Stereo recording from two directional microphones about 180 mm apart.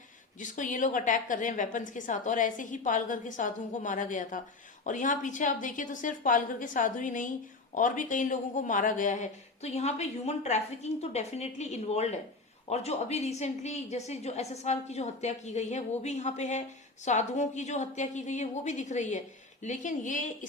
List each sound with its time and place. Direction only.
0.3 s a woman's voice: 45° left (ahead or behind)